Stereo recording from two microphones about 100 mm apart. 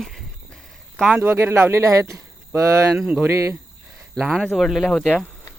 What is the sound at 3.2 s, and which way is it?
Speech, 25° right (ahead or behind).